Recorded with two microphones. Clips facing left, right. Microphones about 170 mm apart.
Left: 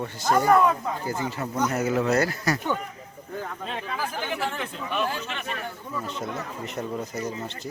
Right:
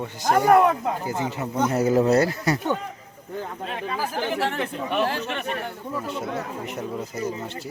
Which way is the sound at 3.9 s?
35° right (ahead or behind).